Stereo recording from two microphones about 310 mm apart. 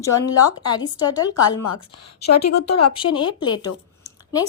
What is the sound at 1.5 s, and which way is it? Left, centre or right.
A woman's voice, left.